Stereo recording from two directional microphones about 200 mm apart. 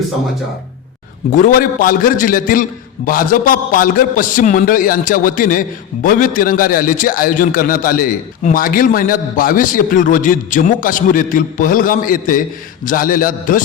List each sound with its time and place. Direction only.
1.3 s a man's voice: 40° left (ahead or behind)